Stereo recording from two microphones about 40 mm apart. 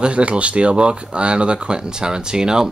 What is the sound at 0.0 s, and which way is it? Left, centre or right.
Speech, right.